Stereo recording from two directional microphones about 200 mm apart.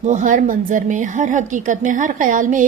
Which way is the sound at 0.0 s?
35° right (ahead or behind).